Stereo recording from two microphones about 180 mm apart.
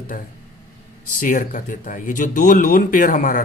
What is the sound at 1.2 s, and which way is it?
Speech, 45° left (ahead or behind).